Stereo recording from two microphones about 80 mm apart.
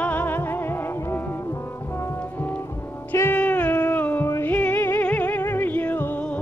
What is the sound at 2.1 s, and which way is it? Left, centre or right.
Music, left.